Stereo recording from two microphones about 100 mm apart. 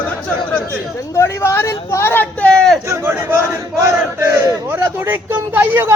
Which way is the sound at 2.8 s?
25° right (ahead or behind).